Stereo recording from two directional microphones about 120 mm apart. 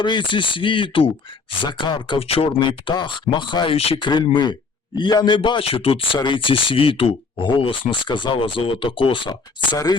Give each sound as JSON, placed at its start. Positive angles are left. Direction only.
{"t": 0.0, "sound": "speech", "side_deg": 40}
{"t": 2.6, "sound": "speech", "side_deg": 40}
{"t": 3.8, "sound": "speech", "side_deg": 55}
{"t": 4.0, "sound": "speech", "side_deg": 40}
{"t": 6.1, "sound": "speech", "side_deg": 40}